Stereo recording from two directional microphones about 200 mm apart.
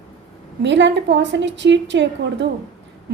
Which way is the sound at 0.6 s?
65° right (ahead or behind).